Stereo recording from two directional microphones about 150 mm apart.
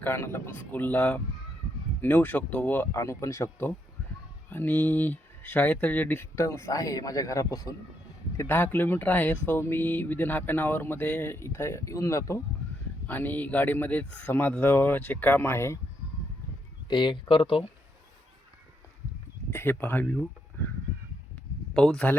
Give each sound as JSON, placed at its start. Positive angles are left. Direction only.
{"t": 0.0, "sound": "speech", "side_deg": 15}
{"t": 16.9, "sound": "speech", "side_deg": 30}
{"t": 19.5, "sound": "speech", "side_deg": 15}
{"t": 21.7, "sound": "speech", "side_deg": 5}